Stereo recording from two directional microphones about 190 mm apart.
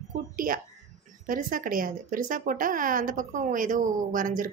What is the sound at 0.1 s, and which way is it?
A woman's voice, 45° right (ahead or behind).